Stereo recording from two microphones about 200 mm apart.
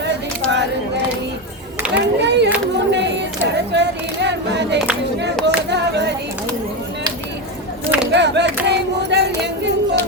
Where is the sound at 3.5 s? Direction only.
60° right (ahead or behind).